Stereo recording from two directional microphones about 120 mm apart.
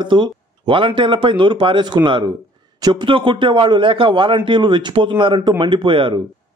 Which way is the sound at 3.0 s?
45° right (ahead or behind).